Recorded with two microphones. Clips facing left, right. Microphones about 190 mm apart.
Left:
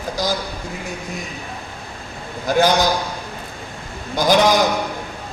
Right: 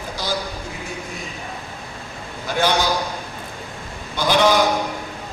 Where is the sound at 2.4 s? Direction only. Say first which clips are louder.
Left 4 dB; 40° left (ahead or behind).